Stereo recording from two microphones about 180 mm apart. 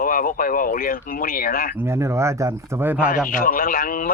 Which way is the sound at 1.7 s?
15° right (ahead or behind).